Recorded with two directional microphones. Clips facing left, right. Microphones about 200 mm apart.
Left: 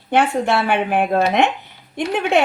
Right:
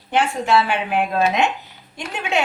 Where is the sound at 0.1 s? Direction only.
55° left (ahead or behind).